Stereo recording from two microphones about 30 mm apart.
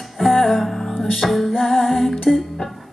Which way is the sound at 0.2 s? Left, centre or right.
Centre.